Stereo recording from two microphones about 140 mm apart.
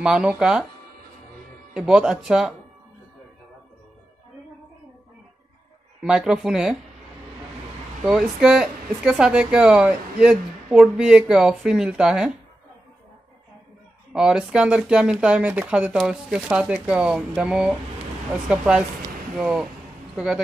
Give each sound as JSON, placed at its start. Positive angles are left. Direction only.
{"t": 0.0, "sound": "speech", "side_deg": -5}
{"t": 1.7, "sound": "speech", "side_deg": -5}
{"t": 6.0, "sound": "speech", "side_deg": -5}
{"t": 8.0, "sound": "speech", "side_deg": -5}
{"t": 14.1, "sound": "speech", "side_deg": -5}